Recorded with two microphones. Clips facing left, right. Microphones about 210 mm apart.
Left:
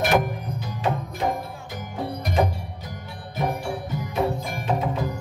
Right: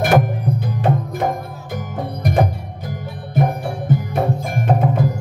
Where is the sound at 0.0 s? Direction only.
55° right (ahead or behind).